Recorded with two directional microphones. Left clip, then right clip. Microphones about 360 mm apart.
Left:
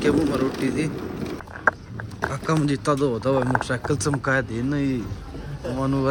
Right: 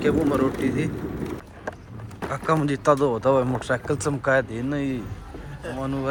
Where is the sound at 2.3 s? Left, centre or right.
Centre.